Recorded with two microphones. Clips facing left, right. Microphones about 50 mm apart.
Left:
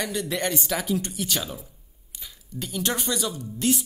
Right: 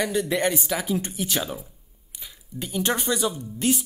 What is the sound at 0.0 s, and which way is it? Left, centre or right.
Speech, centre.